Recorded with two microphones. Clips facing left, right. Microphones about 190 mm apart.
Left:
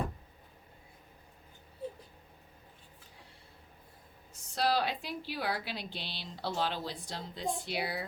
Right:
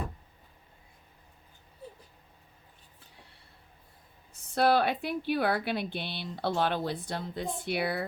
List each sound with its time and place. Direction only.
4.5 s a woman's voice: 55° right (ahead or behind)